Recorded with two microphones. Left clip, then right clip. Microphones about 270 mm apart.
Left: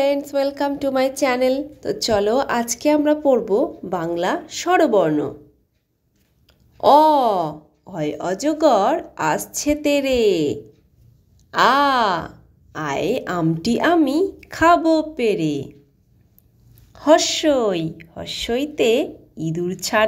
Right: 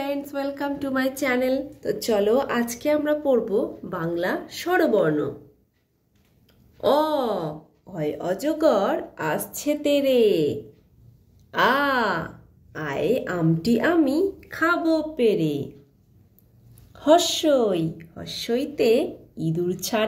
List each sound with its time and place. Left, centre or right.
0.0 s speech: left
6.8 s speech: left
17.1 s a woman's voice: left
17.4 s speech: left